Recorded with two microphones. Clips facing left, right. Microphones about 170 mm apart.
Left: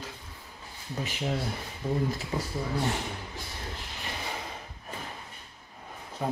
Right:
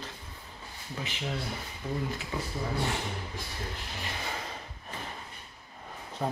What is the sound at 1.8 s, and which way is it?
Speech, 30° left (ahead or behind).